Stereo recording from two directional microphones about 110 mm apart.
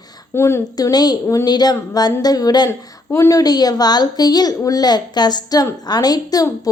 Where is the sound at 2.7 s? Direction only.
25° left (ahead or behind).